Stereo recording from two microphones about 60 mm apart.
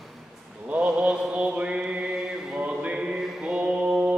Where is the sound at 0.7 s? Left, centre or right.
Right.